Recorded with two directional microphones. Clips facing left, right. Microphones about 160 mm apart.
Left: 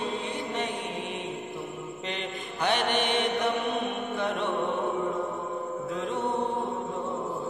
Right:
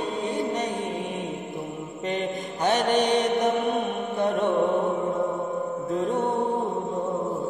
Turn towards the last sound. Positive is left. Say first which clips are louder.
# right 6 dB
turn(degrees=-45)  # may be behind; listen again after turning